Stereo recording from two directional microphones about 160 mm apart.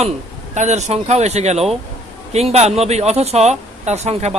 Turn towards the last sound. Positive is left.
turn(degrees=-40)  # may be behind; listen again after turning